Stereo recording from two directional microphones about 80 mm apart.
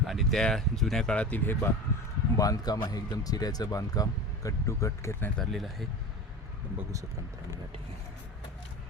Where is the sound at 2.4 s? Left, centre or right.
Left.